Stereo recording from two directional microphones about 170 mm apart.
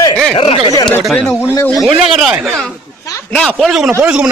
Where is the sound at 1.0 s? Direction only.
5° left (ahead or behind).